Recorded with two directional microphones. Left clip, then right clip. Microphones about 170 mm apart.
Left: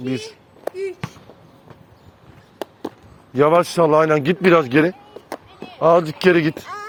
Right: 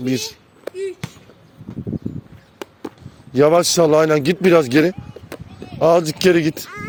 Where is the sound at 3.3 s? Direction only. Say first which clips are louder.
Right 2 dB; 65° right (ahead or behind).